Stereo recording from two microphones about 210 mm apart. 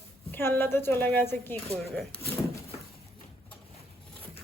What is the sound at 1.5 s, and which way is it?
Speech, 30° right (ahead or behind).